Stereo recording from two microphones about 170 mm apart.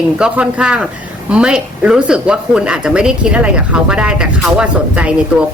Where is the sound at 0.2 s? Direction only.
5° right (ahead or behind).